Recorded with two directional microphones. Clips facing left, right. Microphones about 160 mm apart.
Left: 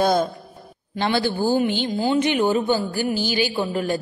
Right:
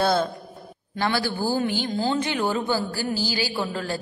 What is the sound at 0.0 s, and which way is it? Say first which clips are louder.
A man's voice: left 3 dB; 15° left (ahead or behind).